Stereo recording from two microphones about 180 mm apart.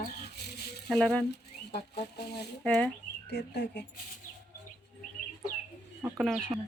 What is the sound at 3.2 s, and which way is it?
Speech, 65° left (ahead or behind).